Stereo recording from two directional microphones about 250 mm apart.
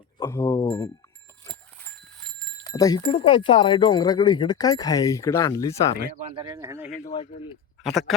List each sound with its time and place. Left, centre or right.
0.2 s speech: centre
1.5 s dog: centre
2.6 s speech: centre
6.3 s speech: centre
7.9 s speech: centre